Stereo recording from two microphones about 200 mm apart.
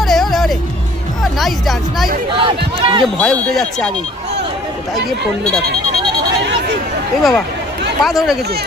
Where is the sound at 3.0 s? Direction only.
Centre (ahead or behind).